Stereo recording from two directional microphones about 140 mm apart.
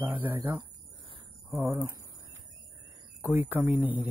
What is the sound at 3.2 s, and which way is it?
Speech, 15° right (ahead or behind).